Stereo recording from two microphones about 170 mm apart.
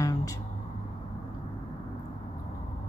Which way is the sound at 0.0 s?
20° left (ahead or behind).